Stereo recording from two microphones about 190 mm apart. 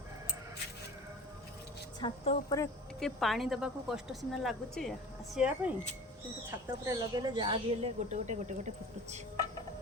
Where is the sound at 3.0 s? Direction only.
Centre (ahead or behind).